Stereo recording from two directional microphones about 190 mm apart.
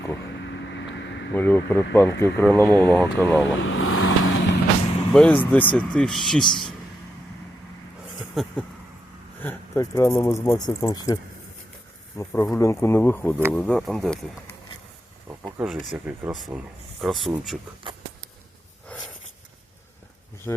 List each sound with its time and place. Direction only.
1.3 s speech: 10° left (ahead or behind)
3.6 s vehicle: 90° left
5.1 s speech: 5° left (ahead or behind)
8.4 s speech: centre (ahead or behind)
9.4 s speech: 15° left (ahead or behind)
15.5 s speech: centre (ahead or behind)
20.5 s speech: 15° left (ahead or behind)